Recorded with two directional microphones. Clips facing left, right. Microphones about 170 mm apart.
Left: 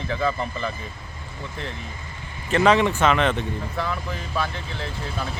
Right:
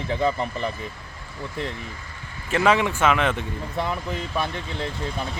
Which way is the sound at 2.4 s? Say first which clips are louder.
Left 2 dB; 10° right (ahead or behind).